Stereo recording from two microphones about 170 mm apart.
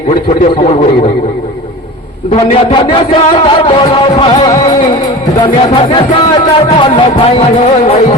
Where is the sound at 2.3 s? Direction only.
30° left (ahead or behind).